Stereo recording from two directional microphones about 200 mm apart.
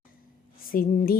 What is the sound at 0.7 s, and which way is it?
Speech, 45° left (ahead or behind).